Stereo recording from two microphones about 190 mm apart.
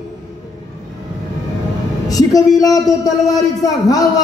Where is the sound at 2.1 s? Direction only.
20° left (ahead or behind).